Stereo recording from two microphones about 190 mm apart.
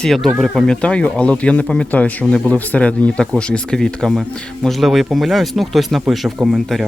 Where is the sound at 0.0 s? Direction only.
Centre (ahead or behind).